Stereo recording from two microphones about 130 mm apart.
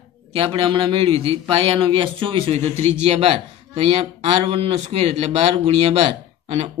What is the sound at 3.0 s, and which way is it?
A man's voice, 55° right (ahead or behind).